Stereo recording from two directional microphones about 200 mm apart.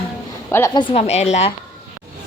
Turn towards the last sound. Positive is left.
turn(degrees=35)  # may be behind; listen again after turning